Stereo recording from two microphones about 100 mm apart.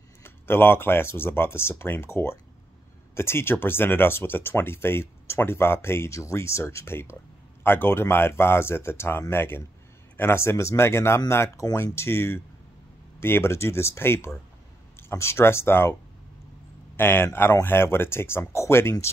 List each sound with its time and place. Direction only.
0.2 s speech: 25° left (ahead or behind)
16.9 s speech: 20° left (ahead or behind)